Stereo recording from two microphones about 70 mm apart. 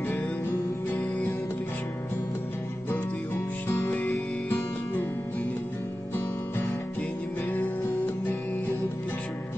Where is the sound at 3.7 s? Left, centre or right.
Left.